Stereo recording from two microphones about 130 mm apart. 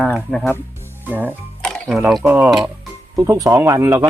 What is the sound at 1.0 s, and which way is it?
Speech, 15° right (ahead or behind).